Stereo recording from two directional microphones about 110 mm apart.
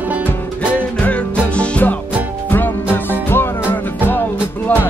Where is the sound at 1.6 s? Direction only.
10° left (ahead or behind).